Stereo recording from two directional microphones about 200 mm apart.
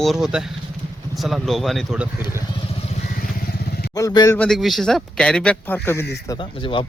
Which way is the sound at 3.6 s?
50° left (ahead or behind).